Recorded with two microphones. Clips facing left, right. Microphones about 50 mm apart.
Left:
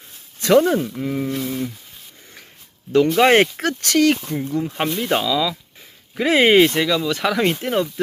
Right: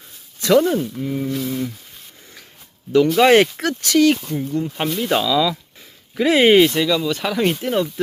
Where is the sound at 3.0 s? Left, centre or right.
Left.